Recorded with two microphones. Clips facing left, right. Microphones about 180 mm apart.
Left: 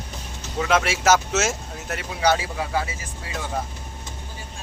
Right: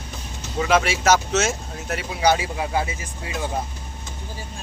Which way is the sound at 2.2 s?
15° right (ahead or behind).